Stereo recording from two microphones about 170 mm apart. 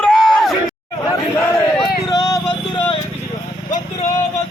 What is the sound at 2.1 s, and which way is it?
Music, 25° left (ahead or behind).